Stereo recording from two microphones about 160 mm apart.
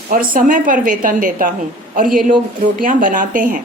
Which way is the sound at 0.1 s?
55° right (ahead or behind).